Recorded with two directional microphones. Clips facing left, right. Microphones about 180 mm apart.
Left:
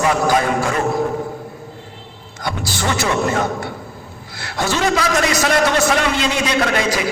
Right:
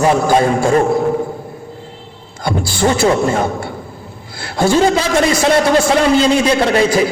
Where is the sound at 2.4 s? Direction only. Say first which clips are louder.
Right 7 dB; 30° right (ahead or behind).